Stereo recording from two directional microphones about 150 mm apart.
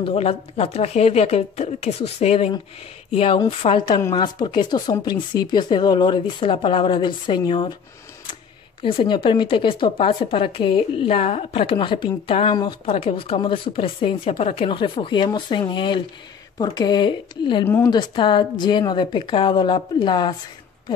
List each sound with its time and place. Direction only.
0.0 s a woman's voice: 40° left (ahead or behind)
8.8 s a woman's voice: 35° left (ahead or behind)